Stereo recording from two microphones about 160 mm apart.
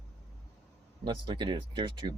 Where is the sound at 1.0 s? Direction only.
30° right (ahead or behind).